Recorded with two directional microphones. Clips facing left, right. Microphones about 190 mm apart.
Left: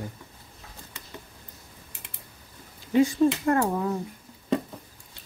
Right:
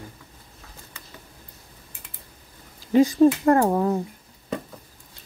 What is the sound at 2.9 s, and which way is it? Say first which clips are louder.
Speech: right 4 dB; 35° right (ahead or behind).